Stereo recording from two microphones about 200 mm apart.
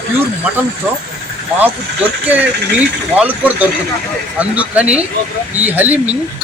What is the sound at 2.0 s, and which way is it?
A man's voice, 5° right (ahead or behind).